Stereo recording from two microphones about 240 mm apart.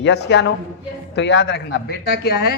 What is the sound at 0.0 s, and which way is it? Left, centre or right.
A man's voice, left.